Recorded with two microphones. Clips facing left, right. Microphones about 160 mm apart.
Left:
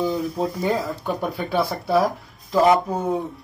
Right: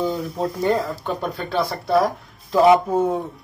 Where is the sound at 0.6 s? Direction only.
5° left (ahead or behind).